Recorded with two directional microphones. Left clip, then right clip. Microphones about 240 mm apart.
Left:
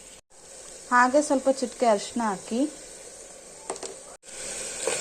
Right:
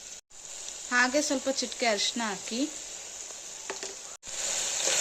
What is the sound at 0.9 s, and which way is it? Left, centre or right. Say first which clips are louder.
Speech: left 6 dB; centre.